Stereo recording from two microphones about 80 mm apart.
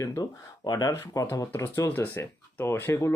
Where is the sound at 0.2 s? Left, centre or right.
Left.